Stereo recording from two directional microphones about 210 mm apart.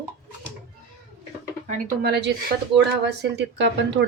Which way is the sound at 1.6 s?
35° right (ahead or behind).